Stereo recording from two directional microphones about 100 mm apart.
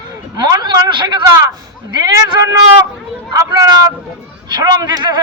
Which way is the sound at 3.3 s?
30° right (ahead or behind).